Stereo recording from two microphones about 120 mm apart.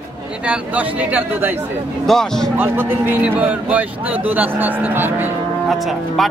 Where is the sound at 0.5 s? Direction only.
10° right (ahead or behind).